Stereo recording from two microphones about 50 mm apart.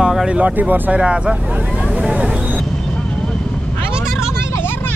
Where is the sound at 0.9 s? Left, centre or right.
Right.